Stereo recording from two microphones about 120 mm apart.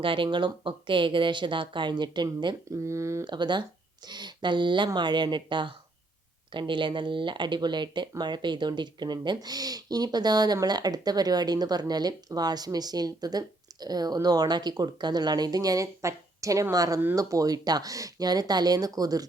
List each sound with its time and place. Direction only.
0.0 s speech: 45° right (ahead or behind)
2.8 s speech: 25° right (ahead or behind)
3.2 s speech: 40° right (ahead or behind)